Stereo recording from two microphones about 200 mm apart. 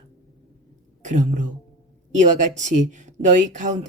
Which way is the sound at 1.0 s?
40° right (ahead or behind).